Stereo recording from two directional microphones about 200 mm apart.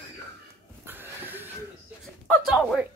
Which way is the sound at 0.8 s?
10° right (ahead or behind).